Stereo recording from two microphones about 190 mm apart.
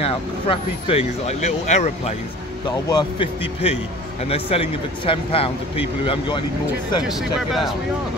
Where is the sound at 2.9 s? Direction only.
20° left (ahead or behind).